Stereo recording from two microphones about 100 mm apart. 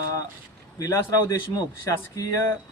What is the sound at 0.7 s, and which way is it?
Speech, 35° left (ahead or behind).